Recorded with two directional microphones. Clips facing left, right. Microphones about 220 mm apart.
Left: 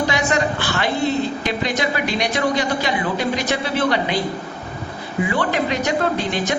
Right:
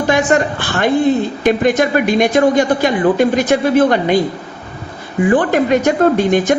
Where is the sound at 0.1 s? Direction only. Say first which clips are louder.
Right 7 dB; 50° right (ahead or behind).